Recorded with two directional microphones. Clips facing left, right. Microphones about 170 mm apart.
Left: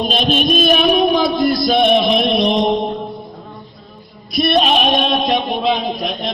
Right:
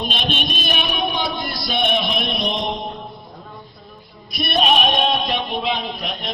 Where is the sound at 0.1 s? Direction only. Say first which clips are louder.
Left 9 dB; 40° left (ahead or behind).